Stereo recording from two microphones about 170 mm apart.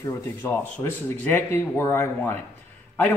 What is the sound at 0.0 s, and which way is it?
Speech, 15° left (ahead or behind).